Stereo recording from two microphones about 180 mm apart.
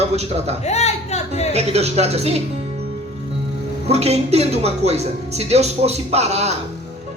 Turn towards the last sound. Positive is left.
turn(degrees=-35)  # may be behind; listen again after turning